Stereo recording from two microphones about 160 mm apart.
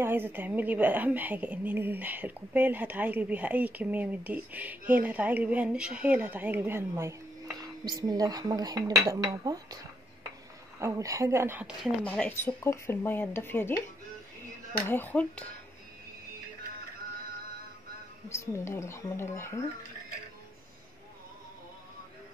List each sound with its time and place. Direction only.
0.0 s a woman's voice: 15° right (ahead or behind)
10.8 s a woman's voice: 20° right (ahead or behind)
12.0 s speech: 10° left (ahead or behind)
14.9 s speech: 10° left (ahead or behind)
18.3 s speech: 20° left (ahead or behind)